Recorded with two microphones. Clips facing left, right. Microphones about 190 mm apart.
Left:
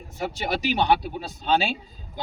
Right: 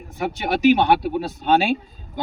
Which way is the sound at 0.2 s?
60° right (ahead or behind).